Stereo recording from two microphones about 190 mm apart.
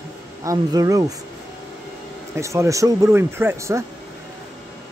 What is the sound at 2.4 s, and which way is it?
Speech, 15° right (ahead or behind).